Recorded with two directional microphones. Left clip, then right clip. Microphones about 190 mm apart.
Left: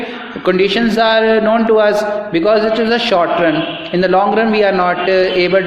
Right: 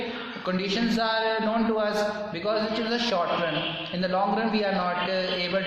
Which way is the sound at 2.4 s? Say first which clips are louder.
Left 14 dB; 35° left (ahead or behind).